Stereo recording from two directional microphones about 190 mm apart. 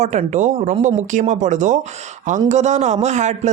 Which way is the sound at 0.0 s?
40° right (ahead or behind).